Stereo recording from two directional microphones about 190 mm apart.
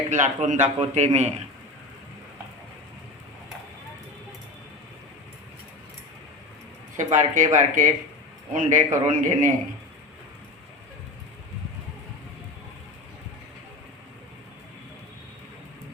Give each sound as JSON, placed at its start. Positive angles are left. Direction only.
{"t": 0.1, "sound": "a man's voice", "side_deg": -40}
{"t": 6.9, "sound": "a man's voice", "side_deg": -40}